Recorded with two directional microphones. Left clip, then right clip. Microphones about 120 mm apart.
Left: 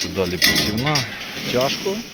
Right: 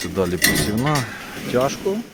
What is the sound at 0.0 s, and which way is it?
Speech, 60° right (ahead or behind).